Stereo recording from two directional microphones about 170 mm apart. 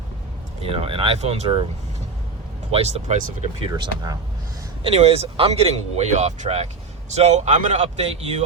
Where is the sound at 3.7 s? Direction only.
20° right (ahead or behind).